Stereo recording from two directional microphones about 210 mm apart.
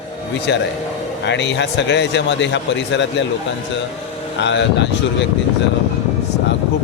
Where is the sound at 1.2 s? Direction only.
55° left (ahead or behind).